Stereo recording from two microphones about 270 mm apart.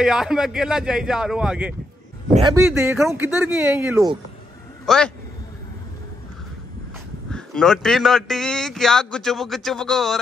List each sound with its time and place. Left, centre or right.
0.0 s a man's voice: centre
2.3 s speech: centre
4.8 s a man's voice: centre
7.2 s a man's voice: centre